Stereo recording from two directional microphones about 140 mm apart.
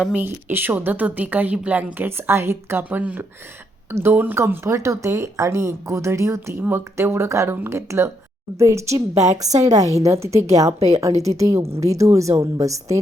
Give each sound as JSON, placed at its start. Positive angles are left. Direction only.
{"t": 0.0, "sound": "a woman's voice", "side_deg": -10}
{"t": 9.1, "sound": "a woman's voice", "side_deg": -55}
{"t": 9.4, "sound": "speech", "side_deg": -25}
{"t": 11.1, "sound": "a woman's voice", "side_deg": -50}
{"t": 11.3, "sound": "speech", "side_deg": -20}